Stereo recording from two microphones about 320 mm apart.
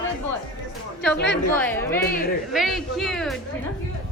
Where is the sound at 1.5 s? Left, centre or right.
Centre.